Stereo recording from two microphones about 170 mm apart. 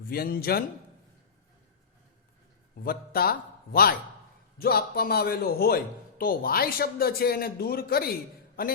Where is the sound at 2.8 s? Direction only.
60° left (ahead or behind).